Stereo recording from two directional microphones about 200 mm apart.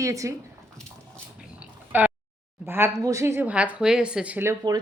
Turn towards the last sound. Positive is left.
turn(degrees=-15)  # may be behind; listen again after turning